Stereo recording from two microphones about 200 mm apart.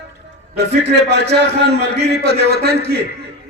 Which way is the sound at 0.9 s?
60° right (ahead or behind).